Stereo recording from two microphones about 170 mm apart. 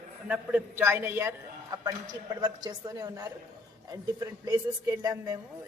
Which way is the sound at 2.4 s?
20° right (ahead or behind).